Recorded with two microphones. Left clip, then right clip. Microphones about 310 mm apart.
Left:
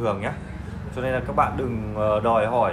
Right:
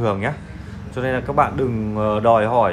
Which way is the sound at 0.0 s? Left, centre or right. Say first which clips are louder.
Right 4 dB; right.